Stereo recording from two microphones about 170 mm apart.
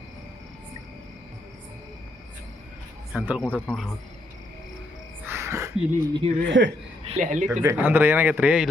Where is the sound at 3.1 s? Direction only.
10° right (ahead or behind).